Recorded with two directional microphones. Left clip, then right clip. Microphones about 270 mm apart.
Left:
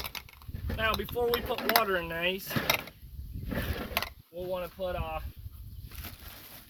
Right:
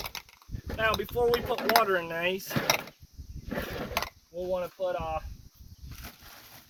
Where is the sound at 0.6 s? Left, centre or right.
Centre.